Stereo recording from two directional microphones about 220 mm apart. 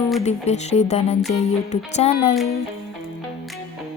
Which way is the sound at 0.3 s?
30° left (ahead or behind).